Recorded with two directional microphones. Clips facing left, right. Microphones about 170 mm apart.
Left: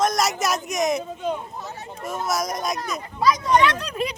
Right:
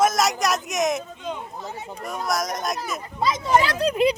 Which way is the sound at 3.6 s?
30° right (ahead or behind).